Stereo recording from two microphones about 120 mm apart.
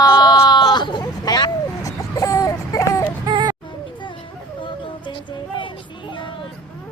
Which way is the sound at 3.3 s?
35° right (ahead or behind).